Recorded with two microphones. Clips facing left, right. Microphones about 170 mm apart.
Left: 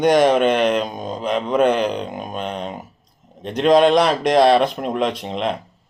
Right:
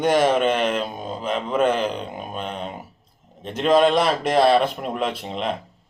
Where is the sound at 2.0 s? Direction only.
40° left (ahead or behind).